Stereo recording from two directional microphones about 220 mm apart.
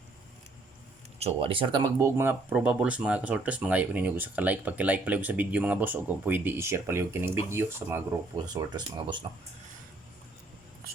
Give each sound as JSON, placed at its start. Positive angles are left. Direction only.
{"t": 1.2, "sound": "speech", "side_deg": -25}